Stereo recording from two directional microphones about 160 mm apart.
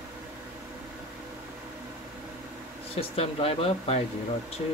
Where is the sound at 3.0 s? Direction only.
35° left (ahead or behind).